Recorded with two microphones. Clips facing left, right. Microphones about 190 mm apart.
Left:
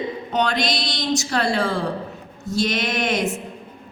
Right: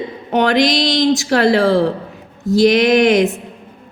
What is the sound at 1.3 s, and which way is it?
Speech, 90° right.